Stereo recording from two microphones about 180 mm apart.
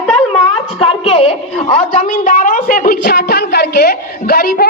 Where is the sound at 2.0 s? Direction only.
50° left (ahead or behind).